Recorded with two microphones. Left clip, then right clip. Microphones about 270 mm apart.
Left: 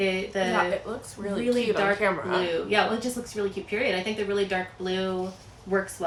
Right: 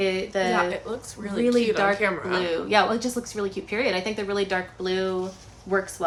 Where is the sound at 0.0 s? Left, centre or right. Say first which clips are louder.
Right 2 dB; centre.